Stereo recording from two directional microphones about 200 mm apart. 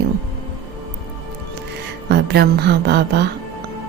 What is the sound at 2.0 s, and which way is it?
Speech, 55° right (ahead or behind).